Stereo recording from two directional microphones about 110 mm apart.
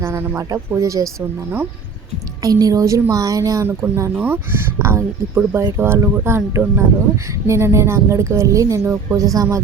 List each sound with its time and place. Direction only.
0.0 s speech: 25° right (ahead or behind)
2.4 s a woman's voice: 35° right (ahead or behind)